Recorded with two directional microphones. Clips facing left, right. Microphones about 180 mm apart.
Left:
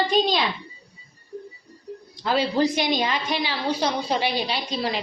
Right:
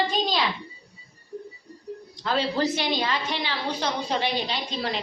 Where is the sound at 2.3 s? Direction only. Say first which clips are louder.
Left 3 dB; 10° left (ahead or behind).